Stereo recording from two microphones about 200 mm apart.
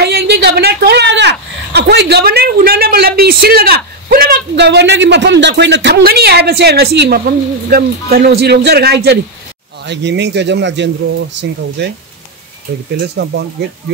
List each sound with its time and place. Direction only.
0.0 s speech: 55° right (ahead or behind)
12.9 s speech: 55° right (ahead or behind)